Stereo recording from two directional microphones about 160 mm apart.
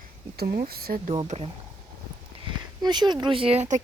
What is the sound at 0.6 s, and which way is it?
Speech, 75° right (ahead or behind).